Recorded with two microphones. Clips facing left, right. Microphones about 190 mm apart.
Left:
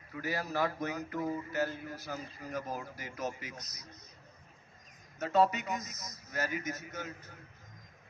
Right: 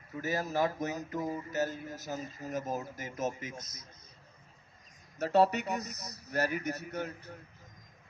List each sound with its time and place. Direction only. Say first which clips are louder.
0.1 s speech: right 2 dB; 20° right (ahead or behind)
1.7 s a man's voice: right 1 dB; 45° right (ahead or behind)
2.4 s speech: right 3 dB; 20° right (ahead or behind)
3.6 s a man's voice: right 2 dB; 50° right (ahead or behind)
5.3 s speech: right 2 dB; 65° right (ahead or behind)